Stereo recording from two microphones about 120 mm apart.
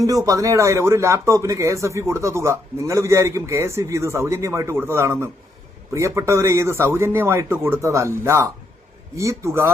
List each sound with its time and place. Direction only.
0.0 s speech: 30° right (ahead or behind)